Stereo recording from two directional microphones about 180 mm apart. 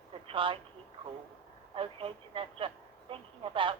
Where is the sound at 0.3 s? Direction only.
30° right (ahead or behind).